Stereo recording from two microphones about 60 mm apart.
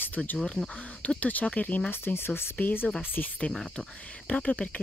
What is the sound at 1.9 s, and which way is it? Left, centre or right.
Speech, left.